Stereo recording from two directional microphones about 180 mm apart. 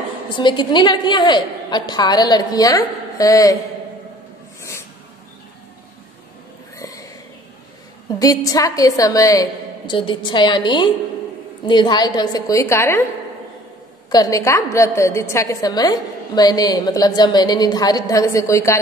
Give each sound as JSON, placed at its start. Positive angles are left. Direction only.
{"t": 0.3, "sound": "a woman's voice", "side_deg": 25}
{"t": 6.8, "sound": "a sound", "side_deg": 20}
{"t": 8.1, "sound": "a woman's voice", "side_deg": 20}
{"t": 14.1, "sound": "a woman's voice", "side_deg": 20}